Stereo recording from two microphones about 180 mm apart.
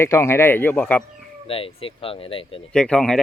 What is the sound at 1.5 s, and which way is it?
Speech, 30° left (ahead or behind).